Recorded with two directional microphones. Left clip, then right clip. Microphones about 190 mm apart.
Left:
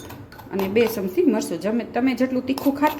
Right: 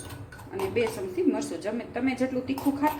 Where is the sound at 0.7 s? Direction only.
60° left (ahead or behind).